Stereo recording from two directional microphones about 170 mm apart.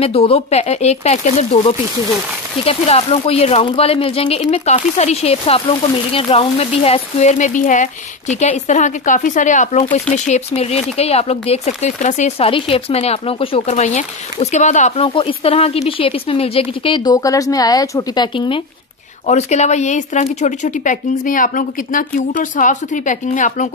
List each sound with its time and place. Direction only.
0.0 s speech: 35° left (ahead or behind)
2.6 s speech: 35° left (ahead or behind)
19.2 s speech: 40° left (ahead or behind)